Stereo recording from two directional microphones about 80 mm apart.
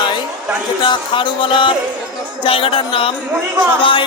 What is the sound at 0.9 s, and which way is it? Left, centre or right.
Speech, left.